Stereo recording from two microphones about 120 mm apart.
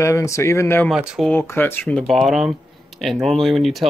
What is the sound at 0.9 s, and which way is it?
Speech, 5° right (ahead or behind).